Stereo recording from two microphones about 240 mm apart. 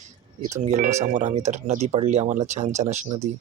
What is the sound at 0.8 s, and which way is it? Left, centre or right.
Speech, right.